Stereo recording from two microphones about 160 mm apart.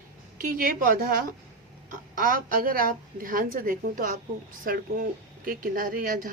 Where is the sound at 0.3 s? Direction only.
65° right (ahead or behind).